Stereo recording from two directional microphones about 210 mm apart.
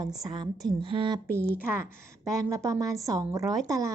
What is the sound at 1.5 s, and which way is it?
Speech, 40° left (ahead or behind).